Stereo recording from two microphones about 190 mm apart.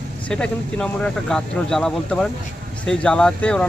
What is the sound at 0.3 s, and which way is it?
Speech, 5° left (ahead or behind).